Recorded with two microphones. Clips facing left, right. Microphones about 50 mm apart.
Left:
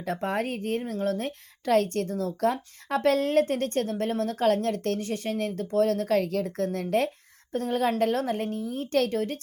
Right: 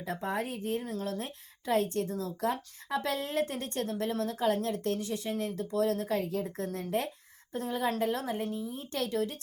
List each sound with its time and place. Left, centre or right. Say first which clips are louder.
0.0 s a woman's voice: left 5 dB; left